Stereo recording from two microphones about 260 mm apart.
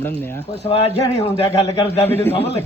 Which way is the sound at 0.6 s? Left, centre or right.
Centre.